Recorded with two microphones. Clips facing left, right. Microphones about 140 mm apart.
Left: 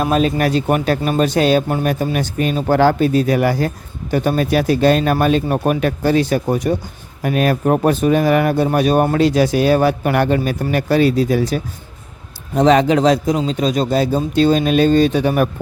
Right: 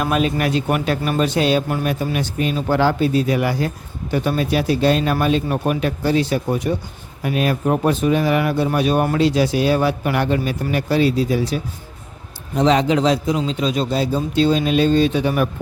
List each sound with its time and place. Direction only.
0.0 s a man's voice: 35° left (ahead or behind)